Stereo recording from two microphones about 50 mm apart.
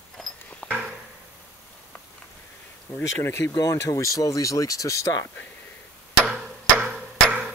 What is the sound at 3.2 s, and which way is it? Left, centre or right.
Speech, left.